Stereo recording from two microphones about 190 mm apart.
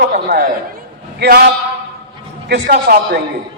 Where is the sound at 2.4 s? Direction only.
60° right (ahead or behind).